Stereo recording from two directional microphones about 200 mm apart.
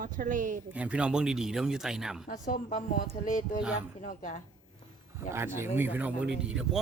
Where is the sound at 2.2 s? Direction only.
40° left (ahead or behind).